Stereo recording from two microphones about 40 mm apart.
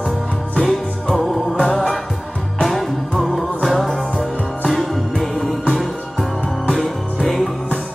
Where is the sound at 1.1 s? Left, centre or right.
Centre.